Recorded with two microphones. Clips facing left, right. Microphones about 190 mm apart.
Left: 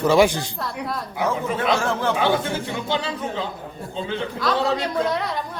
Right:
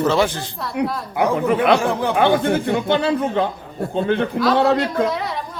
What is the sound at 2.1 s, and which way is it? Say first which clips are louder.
A man's voice: right 5 dB; 60° right (ahead or behind).